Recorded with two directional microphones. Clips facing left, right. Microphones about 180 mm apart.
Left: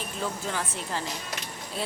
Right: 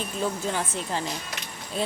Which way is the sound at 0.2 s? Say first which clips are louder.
Right 4 dB; 20° right (ahead or behind).